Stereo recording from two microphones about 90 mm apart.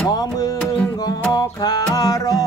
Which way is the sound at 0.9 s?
50° left (ahead or behind).